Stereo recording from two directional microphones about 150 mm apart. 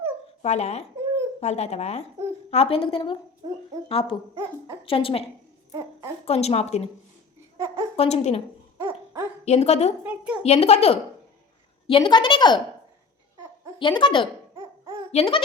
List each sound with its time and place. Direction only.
0.4 s speech: 45° left (ahead or behind)
0.9 s babbling: 20° right (ahead or behind)
1.4 s a woman's voice: 45° left (ahead or behind)
3.4 s speech: 25° right (ahead or behind)
3.8 s a woman's voice: 35° left (ahead or behind)
4.4 s speech: 20° right (ahead or behind)
4.9 s a woman's voice: 35° left (ahead or behind)
6.2 s speech: 40° left (ahead or behind)
7.9 s speech: 45° left (ahead or behind)
9.4 s speech: 45° left (ahead or behind)
10.0 s a sound: 10° right (ahead or behind)
10.4 s a woman's voice: 45° left (ahead or behind)
13.7 s a woman's voice: 35° left (ahead or behind)